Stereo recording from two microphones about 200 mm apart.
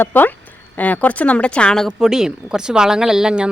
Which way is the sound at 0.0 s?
10° left (ahead or behind).